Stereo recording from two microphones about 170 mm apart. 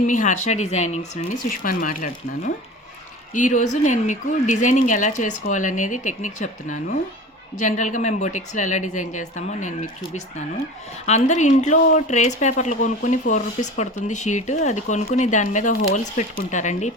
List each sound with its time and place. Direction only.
0.1 s speech: 45° left (ahead or behind)
1.5 s speech: 55° left (ahead or behind)